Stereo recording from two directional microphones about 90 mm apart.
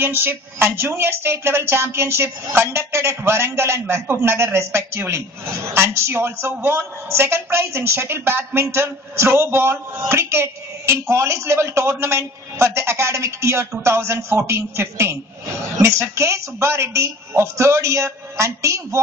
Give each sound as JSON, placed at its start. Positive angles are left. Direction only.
{"t": 0.0, "sound": "a woman's voice", "side_deg": -25}